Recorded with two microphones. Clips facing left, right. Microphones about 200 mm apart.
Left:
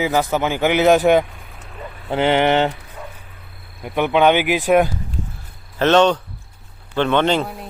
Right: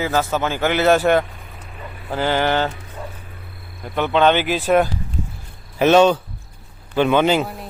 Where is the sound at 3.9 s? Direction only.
15° left (ahead or behind).